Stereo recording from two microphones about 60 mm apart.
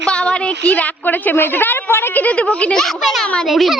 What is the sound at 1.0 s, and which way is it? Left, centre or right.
A woman's voice, left.